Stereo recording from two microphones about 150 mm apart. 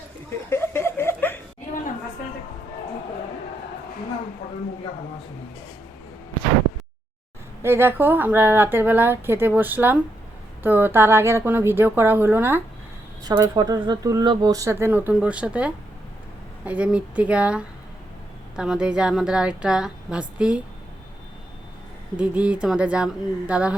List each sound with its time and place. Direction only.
0.5 s chuckle: 15° left (ahead or behind)
7.6 s a woman's voice: 15° right (ahead or behind)
13.2 s a woman's voice: 25° right (ahead or behind); by 20.6 s 5° right (ahead or behind)
22.2 s a woman's voice: 10° right (ahead or behind)